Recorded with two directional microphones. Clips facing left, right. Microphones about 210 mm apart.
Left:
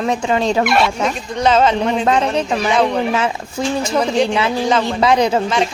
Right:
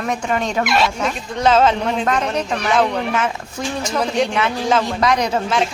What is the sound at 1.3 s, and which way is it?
Speech, centre (ahead or behind).